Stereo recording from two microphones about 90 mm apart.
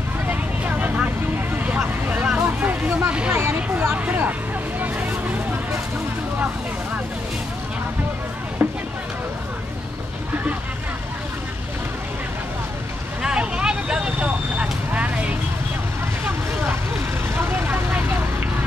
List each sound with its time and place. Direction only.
0.3 s vehicle: 20° right (ahead or behind)
8.6 s music: 20° right (ahead or behind)
13.2 s vehicle: 10° right (ahead or behind)
17.4 s vehicle: 25° right (ahead or behind)